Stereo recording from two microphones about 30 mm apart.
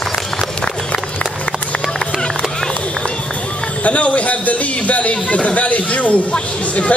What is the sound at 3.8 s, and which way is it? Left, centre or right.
A man's voice, left.